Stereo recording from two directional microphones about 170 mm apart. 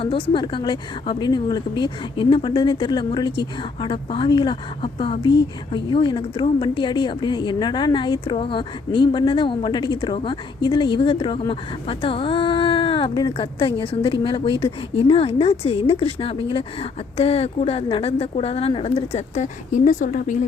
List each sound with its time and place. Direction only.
0.0 s a woman's voice: 30° left (ahead or behind); by 20.4 s 50° left (ahead or behind)